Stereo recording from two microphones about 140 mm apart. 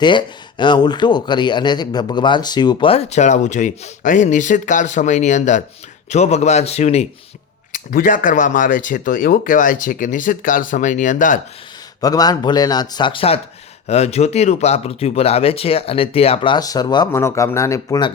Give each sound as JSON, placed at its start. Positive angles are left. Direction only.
{"t": 0.0, "sound": "speech", "side_deg": 35}
{"t": 2.9, "sound": "speech", "side_deg": 50}
{"t": 7.7, "sound": "speech", "side_deg": 70}
{"t": 11.9, "sound": "speech", "side_deg": 25}
{"t": 17.1, "sound": "speech", "side_deg": 20}